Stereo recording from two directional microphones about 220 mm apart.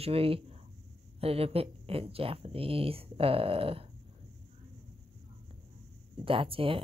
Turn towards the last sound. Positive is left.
turn(degrees=-25)  # may be behind; listen again after turning